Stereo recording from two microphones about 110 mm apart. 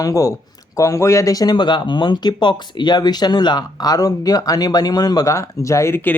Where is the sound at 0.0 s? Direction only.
30° left (ahead or behind).